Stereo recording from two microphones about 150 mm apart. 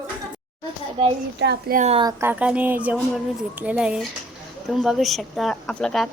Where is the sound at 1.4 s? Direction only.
70° right (ahead or behind).